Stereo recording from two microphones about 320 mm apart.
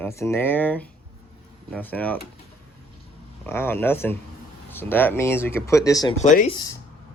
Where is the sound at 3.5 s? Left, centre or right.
Centre.